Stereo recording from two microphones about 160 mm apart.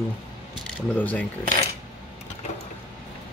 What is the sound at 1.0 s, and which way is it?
Speech, 10° left (ahead or behind).